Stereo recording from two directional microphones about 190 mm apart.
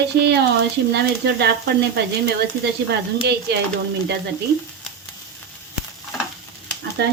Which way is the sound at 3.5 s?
60° right (ahead or behind).